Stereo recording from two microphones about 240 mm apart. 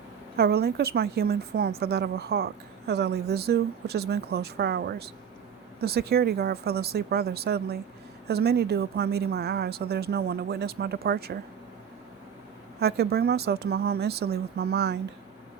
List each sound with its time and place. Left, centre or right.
0.3 s a woman's voice: right
12.8 s a woman's voice: right